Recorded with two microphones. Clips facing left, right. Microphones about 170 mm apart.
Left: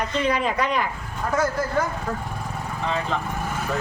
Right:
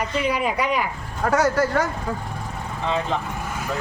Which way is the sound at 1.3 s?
80° right.